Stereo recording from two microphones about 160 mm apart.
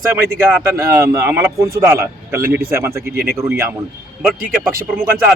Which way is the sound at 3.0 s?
70° right (ahead or behind).